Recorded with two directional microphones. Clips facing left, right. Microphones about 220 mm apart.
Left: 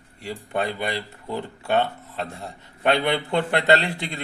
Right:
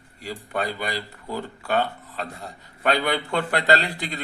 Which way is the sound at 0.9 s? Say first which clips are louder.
Left 1 dB; 25° left (ahead or behind).